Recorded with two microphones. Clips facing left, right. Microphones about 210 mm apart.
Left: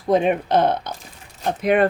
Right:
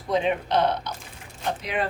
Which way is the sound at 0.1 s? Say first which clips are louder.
Left 6 dB; 50° left (ahead or behind).